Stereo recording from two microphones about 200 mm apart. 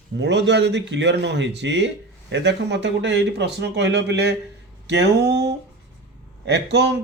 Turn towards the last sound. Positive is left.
turn(degrees=-55)  # may be behind; listen again after turning